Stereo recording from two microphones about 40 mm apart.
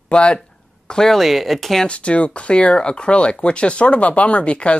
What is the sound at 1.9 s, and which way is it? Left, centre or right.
Speech, left.